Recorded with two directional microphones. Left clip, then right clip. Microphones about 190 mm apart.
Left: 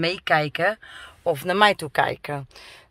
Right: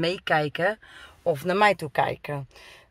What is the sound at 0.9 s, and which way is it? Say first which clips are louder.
Speech: left 2 dB; 5° right (ahead or behind).